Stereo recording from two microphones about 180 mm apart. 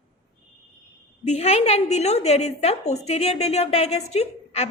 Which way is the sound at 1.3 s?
35° left (ahead or behind).